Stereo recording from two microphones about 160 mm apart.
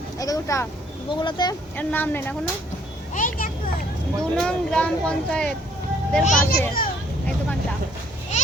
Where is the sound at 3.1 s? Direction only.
55° left (ahead or behind).